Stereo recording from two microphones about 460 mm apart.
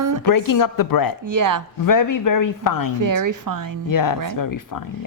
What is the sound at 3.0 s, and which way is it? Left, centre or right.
Speech, right.